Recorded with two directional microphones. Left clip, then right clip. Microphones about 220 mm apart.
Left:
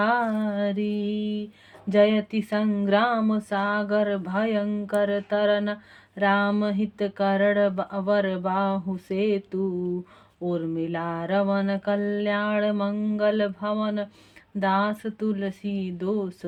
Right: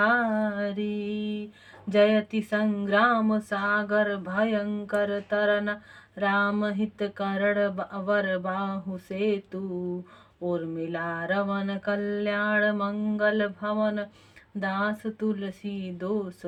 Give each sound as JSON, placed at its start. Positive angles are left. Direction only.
{"t": 0.0, "sound": "mantra", "side_deg": 40}
{"t": 1.9, "sound": "speech", "side_deg": 35}